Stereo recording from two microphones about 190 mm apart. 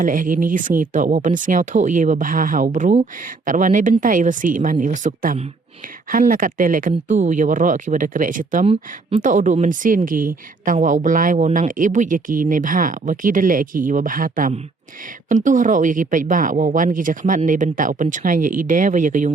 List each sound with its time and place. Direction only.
0.0 s speech: 45° right (ahead or behind)
8.6 s speech: 30° right (ahead or behind)
9.2 s speech: 40° right (ahead or behind)